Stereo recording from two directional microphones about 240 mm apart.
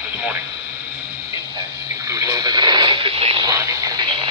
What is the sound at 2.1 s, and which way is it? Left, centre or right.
Radio, centre.